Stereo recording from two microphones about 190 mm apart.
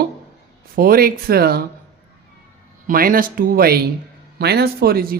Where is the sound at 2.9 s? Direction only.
50° right (ahead or behind).